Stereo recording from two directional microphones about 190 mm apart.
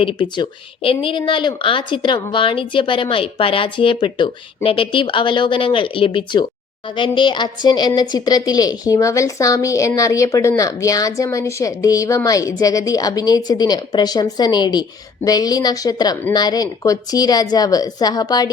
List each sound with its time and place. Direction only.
0.0 s a woman's voice: 25° left (ahead or behind)